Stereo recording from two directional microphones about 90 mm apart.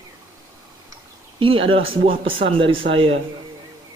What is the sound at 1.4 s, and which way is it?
Speech, 80° right.